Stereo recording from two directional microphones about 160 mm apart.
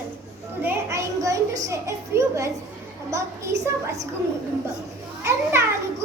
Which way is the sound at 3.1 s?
20° right (ahead or behind).